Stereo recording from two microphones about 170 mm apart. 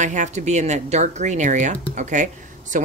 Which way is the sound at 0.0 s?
45° right (ahead or behind).